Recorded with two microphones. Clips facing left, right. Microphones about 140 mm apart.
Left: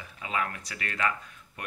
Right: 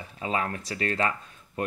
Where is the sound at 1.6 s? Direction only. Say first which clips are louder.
Right 11 dB; 30° right (ahead or behind).